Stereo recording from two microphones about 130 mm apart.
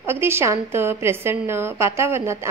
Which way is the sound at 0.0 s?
20° right (ahead or behind).